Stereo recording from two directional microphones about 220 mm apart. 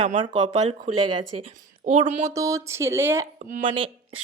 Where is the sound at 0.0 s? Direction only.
30° right (ahead or behind).